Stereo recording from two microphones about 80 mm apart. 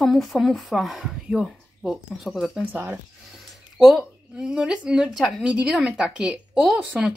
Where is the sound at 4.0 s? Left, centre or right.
Centre.